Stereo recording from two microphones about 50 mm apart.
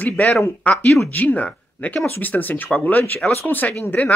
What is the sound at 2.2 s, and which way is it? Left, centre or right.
Speech, left.